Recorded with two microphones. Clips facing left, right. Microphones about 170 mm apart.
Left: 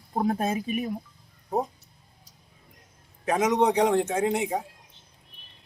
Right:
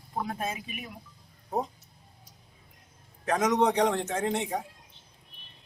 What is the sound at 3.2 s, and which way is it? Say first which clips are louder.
A man's voice: left 2 dB; 10° left (ahead or behind).